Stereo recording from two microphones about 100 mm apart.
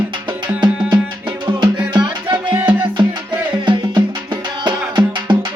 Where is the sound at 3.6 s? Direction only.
50° right (ahead or behind).